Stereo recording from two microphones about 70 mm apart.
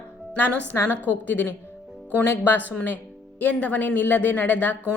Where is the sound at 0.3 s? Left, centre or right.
Left.